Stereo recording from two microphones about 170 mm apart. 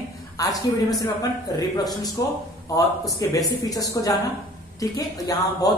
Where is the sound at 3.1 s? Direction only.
20° left (ahead or behind).